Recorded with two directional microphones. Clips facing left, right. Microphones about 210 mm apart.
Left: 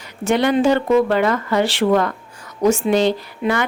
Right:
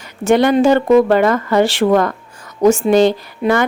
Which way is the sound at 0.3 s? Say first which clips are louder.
Right 4 dB; 45° right (ahead or behind).